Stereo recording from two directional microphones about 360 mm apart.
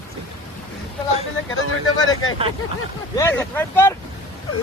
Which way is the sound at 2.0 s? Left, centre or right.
Left.